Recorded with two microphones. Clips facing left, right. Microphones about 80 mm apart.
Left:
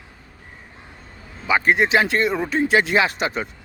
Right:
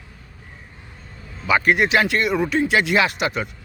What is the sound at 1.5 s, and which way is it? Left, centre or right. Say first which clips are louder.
Speech: even; left.